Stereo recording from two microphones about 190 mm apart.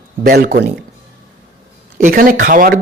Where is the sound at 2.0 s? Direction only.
45° right (ahead or behind).